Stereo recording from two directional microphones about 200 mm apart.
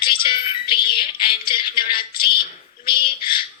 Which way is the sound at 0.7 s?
25° left (ahead or behind).